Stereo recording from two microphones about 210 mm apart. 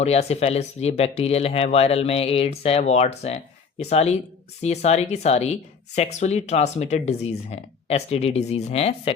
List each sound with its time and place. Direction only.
0.0 s speech: 30° left (ahead or behind)